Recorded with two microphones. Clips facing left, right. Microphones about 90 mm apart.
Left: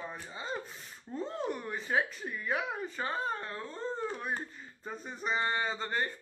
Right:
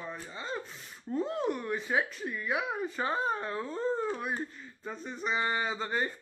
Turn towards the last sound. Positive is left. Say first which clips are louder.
# right 2 dB
turn(degrees=-10)  # may be behind; listen again after turning